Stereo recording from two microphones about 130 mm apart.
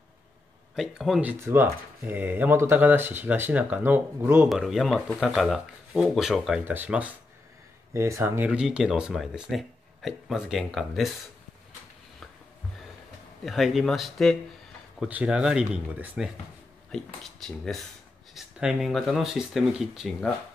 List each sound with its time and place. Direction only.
0.7 s speech: 5° right (ahead or behind)
1.5 s speech: 15° right (ahead or behind)
4.5 s speech: centre (ahead or behind)
6.7 s speech: 10° right (ahead or behind)
8.5 s speech: 5° right (ahead or behind)
13.5 s speech: centre (ahead or behind)
16.9 s speech: centre (ahead or behind)